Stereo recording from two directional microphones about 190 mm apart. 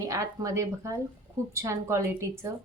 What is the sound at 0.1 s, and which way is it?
A woman's voice, 15° right (ahead or behind).